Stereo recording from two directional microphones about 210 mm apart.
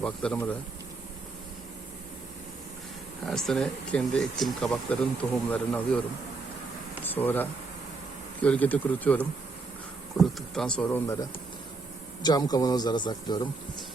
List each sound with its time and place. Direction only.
0.0 s speech: 5° left (ahead or behind)
3.2 s speech: centre (ahead or behind)
7.0 s a sound: 10° left (ahead or behind)
8.4 s a man's voice: 5° left (ahead or behind)